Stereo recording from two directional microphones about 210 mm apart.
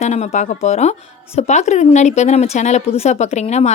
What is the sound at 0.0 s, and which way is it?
A woman's voice, 30° left (ahead or behind).